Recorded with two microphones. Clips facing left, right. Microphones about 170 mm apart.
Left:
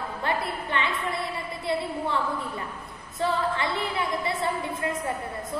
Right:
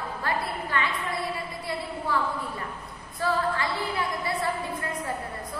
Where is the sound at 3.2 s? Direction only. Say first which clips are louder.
Even; 20° left (ahead or behind).